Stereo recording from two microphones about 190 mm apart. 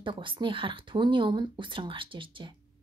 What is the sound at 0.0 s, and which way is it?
Speech, 25° right (ahead or behind).